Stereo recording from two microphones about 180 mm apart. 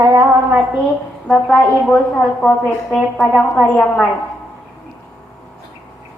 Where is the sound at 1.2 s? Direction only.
Centre (ahead or behind).